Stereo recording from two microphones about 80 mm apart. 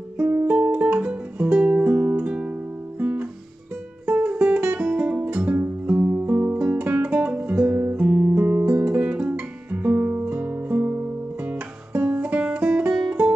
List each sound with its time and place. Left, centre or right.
0.2 s music: right
0.6 s music: centre
3.0 s guitar: right
4.0 s music: right
6.3 s guitar: centre
11.4 s music: right